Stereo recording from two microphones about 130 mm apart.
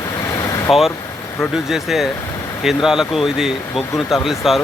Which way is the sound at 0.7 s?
Centre (ahead or behind).